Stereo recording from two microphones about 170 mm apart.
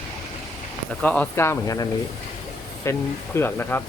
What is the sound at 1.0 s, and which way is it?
Speech, 10° left (ahead or behind).